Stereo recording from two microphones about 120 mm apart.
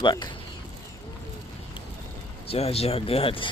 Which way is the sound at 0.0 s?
40° left (ahead or behind).